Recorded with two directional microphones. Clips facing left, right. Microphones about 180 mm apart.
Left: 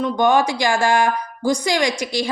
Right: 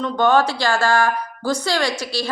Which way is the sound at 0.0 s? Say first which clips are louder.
Even; 15° left (ahead or behind).